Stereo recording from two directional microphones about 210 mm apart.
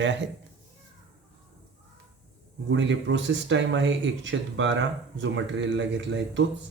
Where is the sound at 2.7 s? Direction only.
60° right (ahead or behind).